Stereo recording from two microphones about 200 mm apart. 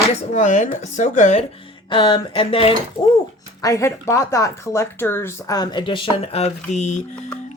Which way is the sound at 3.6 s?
15° left (ahead or behind).